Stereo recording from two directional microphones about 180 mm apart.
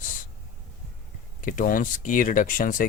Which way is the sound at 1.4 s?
50° left (ahead or behind).